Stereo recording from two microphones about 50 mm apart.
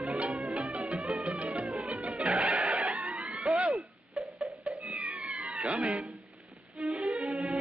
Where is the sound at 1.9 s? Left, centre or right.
Right.